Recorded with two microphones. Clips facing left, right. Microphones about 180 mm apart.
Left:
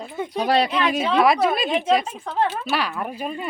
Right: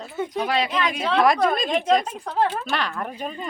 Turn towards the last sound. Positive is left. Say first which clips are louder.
# left 2 dB
turn(degrees=10)  # may be behind; listen again after turning